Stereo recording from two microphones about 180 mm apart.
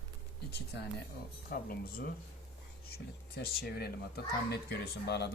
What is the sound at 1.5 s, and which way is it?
A child's voice, 55° left (ahead or behind).